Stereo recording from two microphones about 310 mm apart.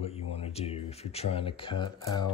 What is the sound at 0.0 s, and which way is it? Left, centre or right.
Speech, centre.